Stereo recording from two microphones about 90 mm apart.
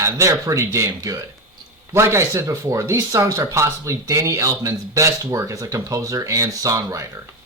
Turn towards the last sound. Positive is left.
turn(degrees=-35)  # may be behind; listen again after turning